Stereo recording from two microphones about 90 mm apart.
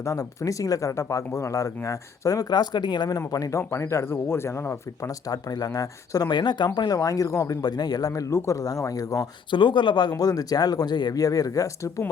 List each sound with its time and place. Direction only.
0.0 s speech: 35° left (ahead or behind); by 3.2 s 55° left (ahead or behind)
3.2 s speech: 40° left (ahead or behind)
5.3 s speech: 45° left (ahead or behind)
6.7 s speech: 45° left (ahead or behind)
9.5 s speech: 60° left (ahead or behind); by 12.0 s 35° left (ahead or behind)